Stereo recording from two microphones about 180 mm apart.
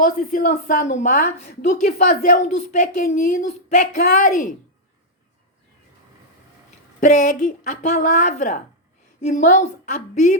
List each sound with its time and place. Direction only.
0.0 s a woman's voice: 50° left (ahead or behind)
7.0 s a woman's voice: 45° left (ahead or behind)